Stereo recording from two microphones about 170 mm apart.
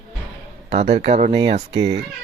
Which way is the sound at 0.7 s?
40° right (ahead or behind).